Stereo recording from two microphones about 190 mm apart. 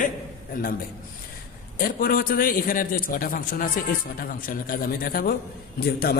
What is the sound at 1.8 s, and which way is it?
A man's voice, 50° left (ahead or behind).